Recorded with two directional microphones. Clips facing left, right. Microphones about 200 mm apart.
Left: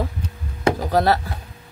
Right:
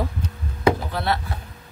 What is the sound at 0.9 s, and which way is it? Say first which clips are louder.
Speech: left 7 dB; 40° left (ahead or behind).